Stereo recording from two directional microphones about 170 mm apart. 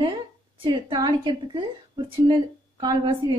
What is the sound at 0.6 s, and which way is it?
Speech, 30° right (ahead or behind).